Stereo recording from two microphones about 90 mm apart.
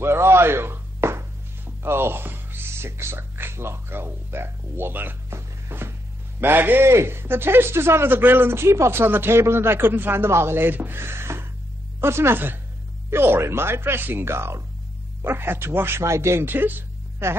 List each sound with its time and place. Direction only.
0.0 s a sound: 30° right (ahead or behind)
1.8 s music: 25° right (ahead or behind)
6.4 s a man's voice: 20° right (ahead or behind)